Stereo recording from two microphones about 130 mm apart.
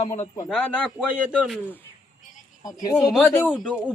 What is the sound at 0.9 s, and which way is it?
Speech, 10° right (ahead or behind).